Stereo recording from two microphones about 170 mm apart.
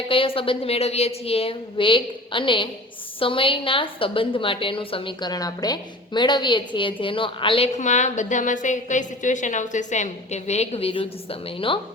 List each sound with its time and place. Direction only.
0.1 s a woman's voice: 30° left (ahead or behind)
7.8 s a woman's voice: 45° left (ahead or behind)